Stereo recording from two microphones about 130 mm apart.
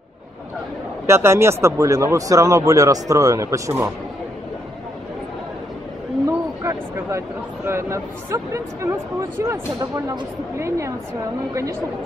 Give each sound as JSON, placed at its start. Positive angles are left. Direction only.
{"t": 1.0, "sound": "speech", "side_deg": -20}
{"t": 6.2, "sound": "speech", "side_deg": -20}